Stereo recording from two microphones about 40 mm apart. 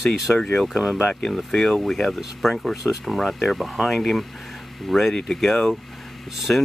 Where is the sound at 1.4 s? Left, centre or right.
Centre.